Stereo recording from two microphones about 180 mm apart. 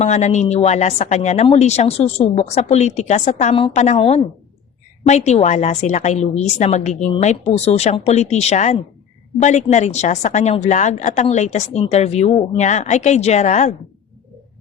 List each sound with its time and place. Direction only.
0.0 s a woman's voice: 40° left (ahead or behind)